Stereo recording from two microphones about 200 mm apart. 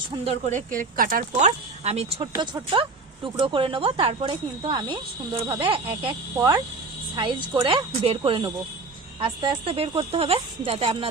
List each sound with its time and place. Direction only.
0.3 s speech: 35° right (ahead or behind)
2.3 s speech: 20° right (ahead or behind)